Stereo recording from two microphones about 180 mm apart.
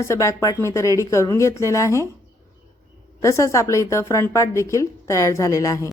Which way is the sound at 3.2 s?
15° left (ahead or behind).